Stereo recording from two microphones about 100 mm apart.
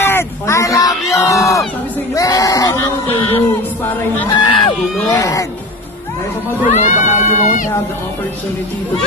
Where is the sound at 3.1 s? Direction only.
65° left (ahead or behind).